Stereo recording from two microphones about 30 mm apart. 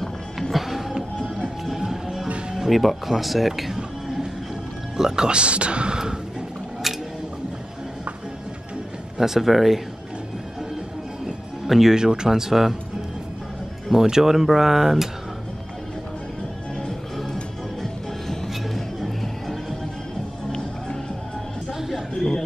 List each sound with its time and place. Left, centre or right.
0.4 s music: centre
2.7 s speech: centre
4.9 s speech: right
5.3 s speech: right
9.2 s speech: centre
11.6 s music: centre
11.9 s speech: right
13.9 s speech: centre
18.9 s music: centre
21.7 s a sound: centre